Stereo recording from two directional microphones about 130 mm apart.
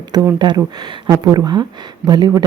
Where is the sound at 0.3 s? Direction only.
35° right (ahead or behind).